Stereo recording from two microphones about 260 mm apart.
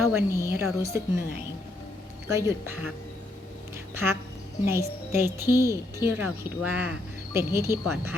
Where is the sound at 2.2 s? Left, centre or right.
Centre.